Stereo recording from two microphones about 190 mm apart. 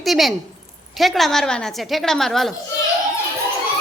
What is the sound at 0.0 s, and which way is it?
A woman's voice, centre (ahead or behind).